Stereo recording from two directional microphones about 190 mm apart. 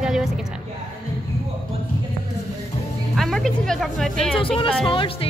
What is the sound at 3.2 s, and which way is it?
Speech, centre (ahead or behind).